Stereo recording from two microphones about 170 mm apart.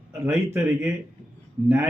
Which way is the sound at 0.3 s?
15° right (ahead or behind).